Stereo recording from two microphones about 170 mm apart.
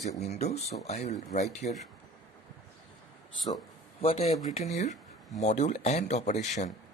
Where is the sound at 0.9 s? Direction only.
40° left (ahead or behind).